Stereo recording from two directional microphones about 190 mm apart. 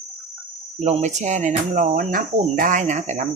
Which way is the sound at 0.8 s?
35° right (ahead or behind).